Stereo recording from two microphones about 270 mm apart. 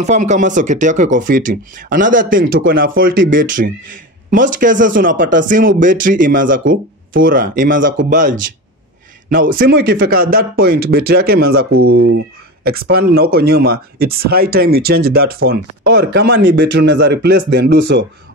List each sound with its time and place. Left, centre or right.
0.0 s speech: right
12.6 s speech: right